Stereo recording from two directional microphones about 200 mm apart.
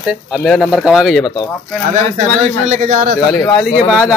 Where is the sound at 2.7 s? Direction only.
35° right (ahead or behind).